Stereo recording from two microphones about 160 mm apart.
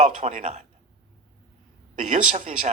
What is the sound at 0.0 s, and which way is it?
Speech, 50° right (ahead or behind).